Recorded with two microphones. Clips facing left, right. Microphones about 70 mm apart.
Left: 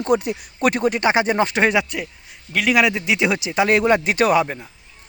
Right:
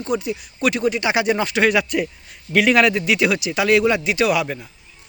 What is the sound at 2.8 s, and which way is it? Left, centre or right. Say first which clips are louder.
A man's voice: right 1 dB; centre.